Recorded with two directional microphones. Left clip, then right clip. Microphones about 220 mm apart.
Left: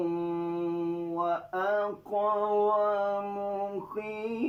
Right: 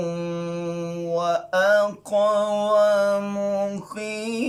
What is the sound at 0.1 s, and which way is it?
Mantra, 55° right (ahead or behind).